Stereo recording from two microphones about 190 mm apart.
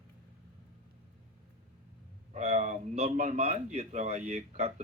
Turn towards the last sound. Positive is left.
turn(degrees=-35)  # may be behind; listen again after turning